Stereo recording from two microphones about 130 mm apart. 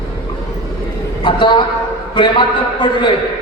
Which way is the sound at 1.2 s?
40° left (ahead or behind).